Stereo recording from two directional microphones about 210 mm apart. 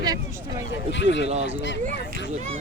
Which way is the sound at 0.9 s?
60° left (ahead or behind).